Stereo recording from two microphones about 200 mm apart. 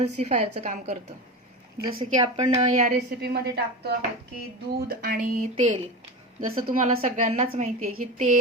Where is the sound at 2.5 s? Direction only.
35° right (ahead or behind); by 3.9 s 50° right (ahead or behind).